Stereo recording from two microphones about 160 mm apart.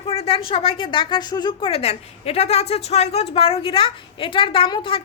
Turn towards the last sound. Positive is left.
turn(degrees=30)  # may be behind; listen again after turning